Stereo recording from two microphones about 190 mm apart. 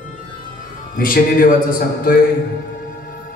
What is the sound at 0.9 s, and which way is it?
A man's voice, 50° left (ahead or behind).